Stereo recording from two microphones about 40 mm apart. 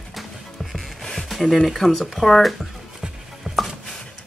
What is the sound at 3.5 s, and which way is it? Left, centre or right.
Chopping, right.